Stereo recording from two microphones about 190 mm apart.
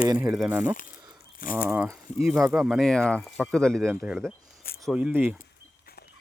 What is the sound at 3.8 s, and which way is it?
Speech, 10° right (ahead or behind).